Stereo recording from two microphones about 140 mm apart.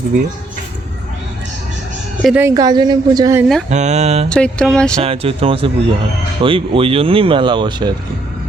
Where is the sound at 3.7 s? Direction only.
55° right (ahead or behind).